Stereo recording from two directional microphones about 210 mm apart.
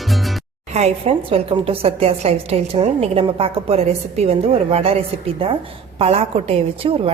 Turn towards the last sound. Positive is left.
turn(degrees=-25)  # may be behind; listen again after turning